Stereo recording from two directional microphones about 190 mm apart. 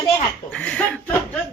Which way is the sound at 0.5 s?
5° left (ahead or behind).